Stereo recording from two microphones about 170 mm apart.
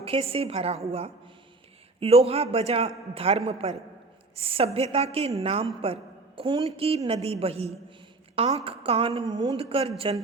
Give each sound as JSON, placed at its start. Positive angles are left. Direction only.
{"t": 0.0, "sound": "a woman's voice", "side_deg": -35}